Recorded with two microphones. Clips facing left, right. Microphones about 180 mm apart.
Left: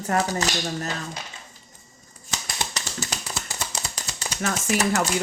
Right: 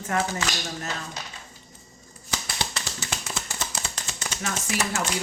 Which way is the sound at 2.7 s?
40° left (ahead or behind).